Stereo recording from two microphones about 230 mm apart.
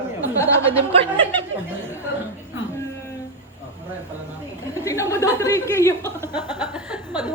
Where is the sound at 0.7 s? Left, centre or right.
Right.